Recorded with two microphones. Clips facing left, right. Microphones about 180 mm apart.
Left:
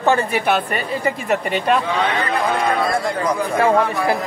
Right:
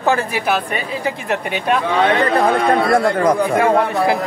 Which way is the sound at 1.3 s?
Centre (ahead or behind).